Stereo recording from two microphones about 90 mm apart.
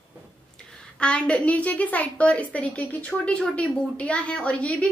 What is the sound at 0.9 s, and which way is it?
A woman's voice, 10° left (ahead or behind).